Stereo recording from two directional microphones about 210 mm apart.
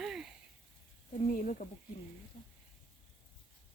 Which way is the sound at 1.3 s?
40° left (ahead or behind).